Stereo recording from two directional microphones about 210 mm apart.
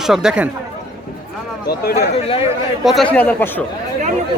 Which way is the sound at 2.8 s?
5° left (ahead or behind).